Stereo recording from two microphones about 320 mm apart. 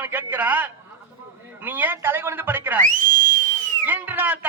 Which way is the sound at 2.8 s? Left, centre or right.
Right.